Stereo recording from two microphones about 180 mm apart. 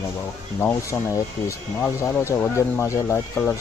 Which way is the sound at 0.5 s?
15° left (ahead or behind).